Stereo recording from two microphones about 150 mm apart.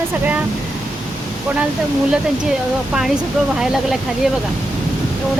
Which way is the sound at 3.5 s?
Centre (ahead or behind).